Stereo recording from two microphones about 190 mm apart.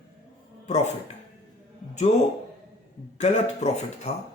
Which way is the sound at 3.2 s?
35° left (ahead or behind).